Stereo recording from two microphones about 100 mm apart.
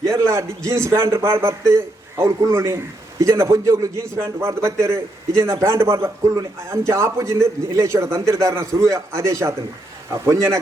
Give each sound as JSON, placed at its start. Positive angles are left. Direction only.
{"t": 0.0, "sound": "a man's voice", "side_deg": -30}